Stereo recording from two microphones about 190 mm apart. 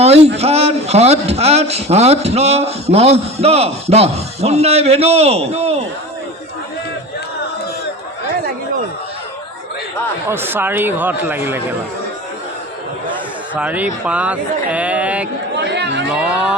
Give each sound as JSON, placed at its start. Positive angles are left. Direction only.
{"t": 0.3, "sound": "a man's voice", "side_deg": -35}
{"t": 10.2, "sound": "speech", "side_deg": -10}
{"t": 13.6, "sound": "speech", "side_deg": -10}
{"t": 15.5, "sound": "chatter", "side_deg": -65}
{"t": 16.0, "sound": "music", "side_deg": -5}